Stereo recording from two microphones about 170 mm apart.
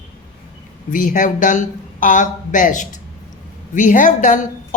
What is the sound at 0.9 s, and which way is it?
A woman's voice, 50° left (ahead or behind).